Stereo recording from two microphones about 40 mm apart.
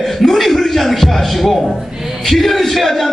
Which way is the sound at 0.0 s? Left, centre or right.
Centre.